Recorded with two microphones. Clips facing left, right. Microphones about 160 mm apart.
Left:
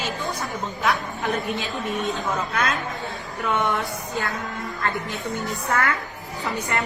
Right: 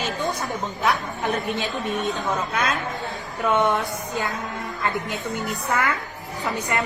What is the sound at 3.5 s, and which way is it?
Speech, 20° right (ahead or behind).